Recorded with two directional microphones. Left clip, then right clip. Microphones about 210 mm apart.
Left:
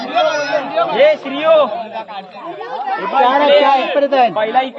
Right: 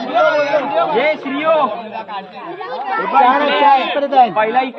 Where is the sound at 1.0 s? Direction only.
35° left (ahead or behind).